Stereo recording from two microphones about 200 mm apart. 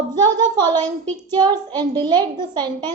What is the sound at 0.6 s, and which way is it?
A child's voice, 20° right (ahead or behind).